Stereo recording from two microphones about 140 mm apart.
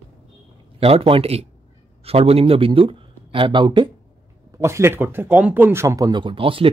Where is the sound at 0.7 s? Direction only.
45° right (ahead or behind).